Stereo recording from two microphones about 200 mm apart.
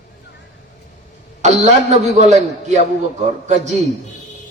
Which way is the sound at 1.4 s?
35° right (ahead or behind).